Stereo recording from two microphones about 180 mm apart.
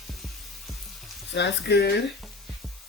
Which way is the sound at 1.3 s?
70° left (ahead or behind).